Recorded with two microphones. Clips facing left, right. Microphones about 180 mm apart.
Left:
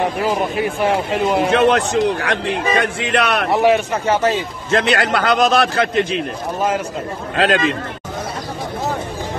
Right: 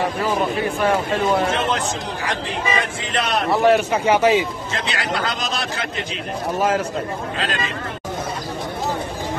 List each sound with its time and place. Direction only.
0.8 s speech: 15° left (ahead or behind)
1.5 s a man's voice: 65° left (ahead or behind)
3.9 s a man's voice: 10° right (ahead or behind)
4.6 s a man's voice: 65° left (ahead or behind)
7.3 s speech: 65° left (ahead or behind)